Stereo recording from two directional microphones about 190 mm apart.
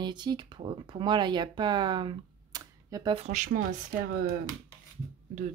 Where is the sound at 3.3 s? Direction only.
40° right (ahead or behind).